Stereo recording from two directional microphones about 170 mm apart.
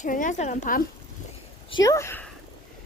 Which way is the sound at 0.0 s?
50° left (ahead or behind).